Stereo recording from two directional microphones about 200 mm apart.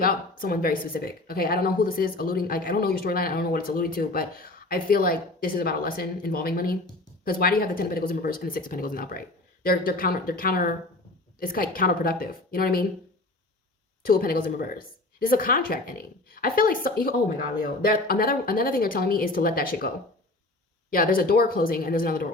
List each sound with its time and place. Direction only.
0.0 s speech: 45° left (ahead or behind)
14.0 s speech: 45° left (ahead or behind)
20.9 s speech: 45° left (ahead or behind)